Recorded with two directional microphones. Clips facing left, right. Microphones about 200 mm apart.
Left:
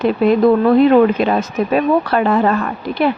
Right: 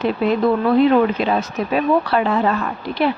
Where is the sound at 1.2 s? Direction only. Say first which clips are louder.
Left 4 dB; 50° left (ahead or behind).